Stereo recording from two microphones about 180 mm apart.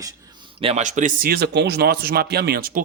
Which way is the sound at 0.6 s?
35° right (ahead or behind).